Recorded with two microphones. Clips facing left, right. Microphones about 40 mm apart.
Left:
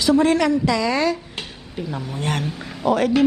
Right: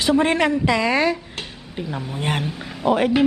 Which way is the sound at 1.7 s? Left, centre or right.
Centre.